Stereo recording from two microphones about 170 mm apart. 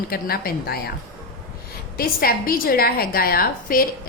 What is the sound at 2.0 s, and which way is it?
A woman's voice, 60° left (ahead or behind).